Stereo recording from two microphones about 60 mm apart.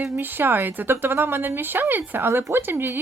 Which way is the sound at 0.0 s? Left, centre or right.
Right.